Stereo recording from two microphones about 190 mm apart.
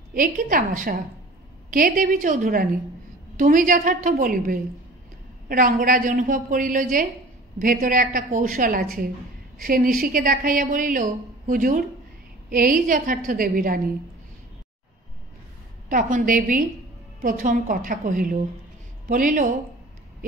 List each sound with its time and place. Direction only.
0.1 s a woman's voice: 45° right (ahead or behind)
15.9 s a woman's voice: 45° right (ahead or behind)